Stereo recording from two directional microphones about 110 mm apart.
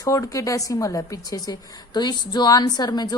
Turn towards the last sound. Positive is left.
turn(degrees=40)  # may be behind; listen again after turning